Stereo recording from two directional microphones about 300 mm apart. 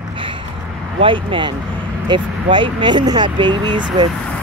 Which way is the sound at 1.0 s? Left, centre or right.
Centre.